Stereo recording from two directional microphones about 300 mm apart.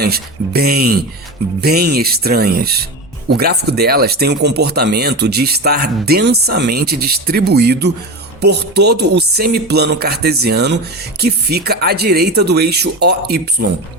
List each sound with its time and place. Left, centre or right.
0.0 s speech: right